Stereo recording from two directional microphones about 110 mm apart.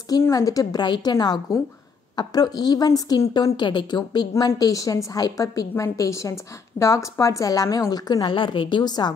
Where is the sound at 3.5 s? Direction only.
45° left (ahead or behind).